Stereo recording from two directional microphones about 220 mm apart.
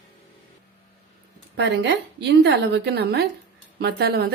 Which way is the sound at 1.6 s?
50° right (ahead or behind).